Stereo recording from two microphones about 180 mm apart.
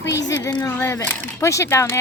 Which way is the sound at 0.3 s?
20° left (ahead or behind).